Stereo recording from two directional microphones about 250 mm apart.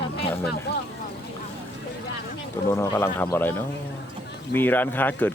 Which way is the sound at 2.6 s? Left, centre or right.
Centre.